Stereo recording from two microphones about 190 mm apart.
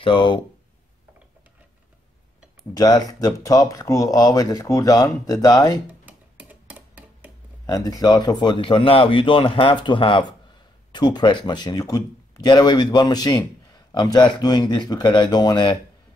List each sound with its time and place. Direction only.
0.0 s speech: 25° left (ahead or behind)
2.7 s speech: 20° left (ahead or behind)
5.9 s tick-tock: 10° right (ahead or behind)
7.6 s speech: 20° left (ahead or behind)